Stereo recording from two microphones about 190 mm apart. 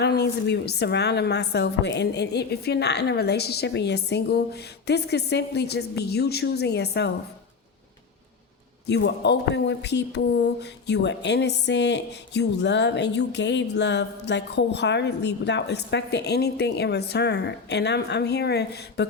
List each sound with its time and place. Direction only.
0.0 s speech: 60° left (ahead or behind)
8.9 s speech: 65° left (ahead or behind)